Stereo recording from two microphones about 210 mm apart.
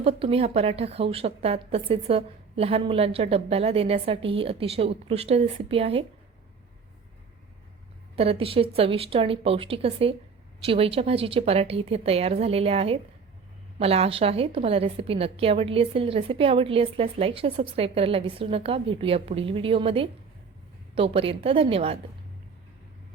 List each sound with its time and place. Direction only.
0.0 s a woman's voice: 25° right (ahead or behind)
8.1 s a woman's voice: 25° right (ahead or behind)